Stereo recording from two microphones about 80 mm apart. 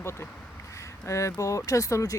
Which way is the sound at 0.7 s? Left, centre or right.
Left.